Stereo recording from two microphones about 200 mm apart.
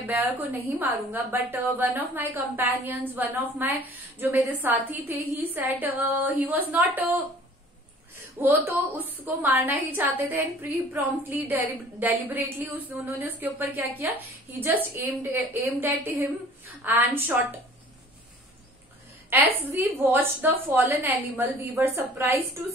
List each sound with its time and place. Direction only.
0.0 s a woman's voice: 10° right (ahead or behind)
8.4 s a woman's voice: 10° right (ahead or behind)
19.7 s a woman's voice: 10° right (ahead or behind)